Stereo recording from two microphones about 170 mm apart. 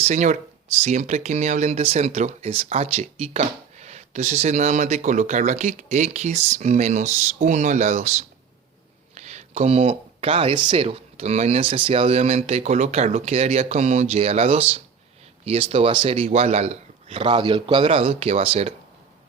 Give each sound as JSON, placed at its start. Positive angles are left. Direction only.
{"t": 0.0, "sound": "speech", "side_deg": -45}